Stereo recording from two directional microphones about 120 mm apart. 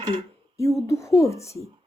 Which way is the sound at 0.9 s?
25° left (ahead or behind).